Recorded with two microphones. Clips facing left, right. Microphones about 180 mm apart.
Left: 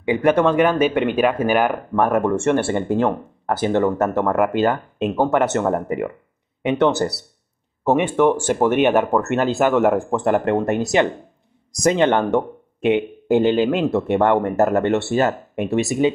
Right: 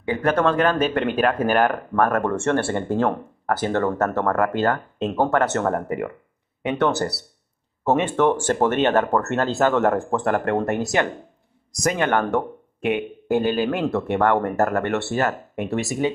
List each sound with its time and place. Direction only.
0.1 s speech: 15° left (ahead or behind)